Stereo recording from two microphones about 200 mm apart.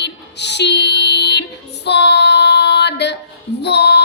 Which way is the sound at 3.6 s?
55° left (ahead or behind).